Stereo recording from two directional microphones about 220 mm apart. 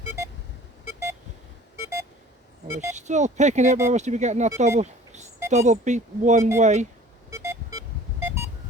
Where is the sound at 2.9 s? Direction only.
30° right (ahead or behind).